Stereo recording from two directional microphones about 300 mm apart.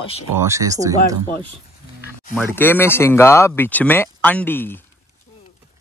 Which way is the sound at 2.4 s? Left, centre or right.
Centre.